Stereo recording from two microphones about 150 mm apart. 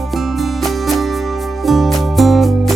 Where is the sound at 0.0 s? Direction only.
Centre (ahead or behind).